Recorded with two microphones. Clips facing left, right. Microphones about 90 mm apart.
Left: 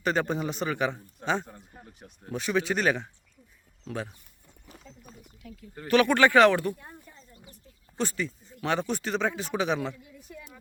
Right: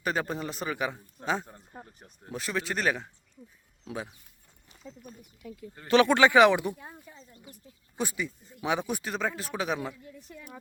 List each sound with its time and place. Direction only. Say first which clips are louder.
0.0 s speech: left 3 dB; 5° right (ahead or behind)
5.9 s speech: even; 20° right (ahead or behind)
6.7 s a sound: right 1 dB; 5° right (ahead or behind)
7.9 s speech: left 2 dB; 10° right (ahead or behind)